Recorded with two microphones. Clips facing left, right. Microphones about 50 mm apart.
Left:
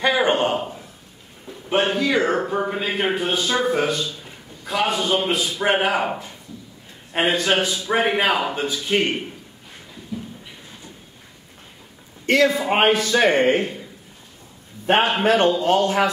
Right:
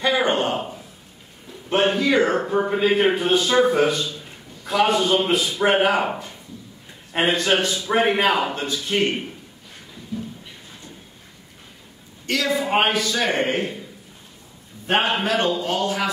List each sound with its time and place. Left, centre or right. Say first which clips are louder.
0.0 s a sound: left 1 dB; centre
1.7 s a man's voice: right 1 dB; centre
12.3 s speech: left 4 dB; left
14.9 s a man's voice: left 2 dB; centre
15.2 s speech: left 5 dB; left